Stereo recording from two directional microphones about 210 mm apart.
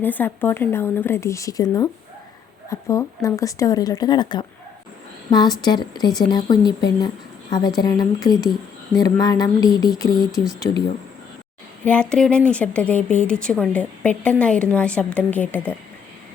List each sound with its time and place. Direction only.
0.0 s a woman's voice: 10° left (ahead or behind)
11.9 s a woman's voice: 5° left (ahead or behind)